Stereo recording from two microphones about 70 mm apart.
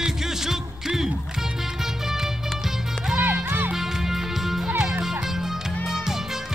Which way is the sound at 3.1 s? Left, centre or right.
Right.